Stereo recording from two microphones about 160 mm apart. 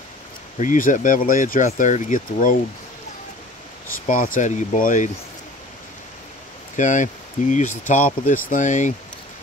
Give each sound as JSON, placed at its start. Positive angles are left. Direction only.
{"t": 0.6, "sound": "speech", "side_deg": 55}
{"t": 4.1, "sound": "speech", "side_deg": 55}
{"t": 6.8, "sound": "speech", "side_deg": 50}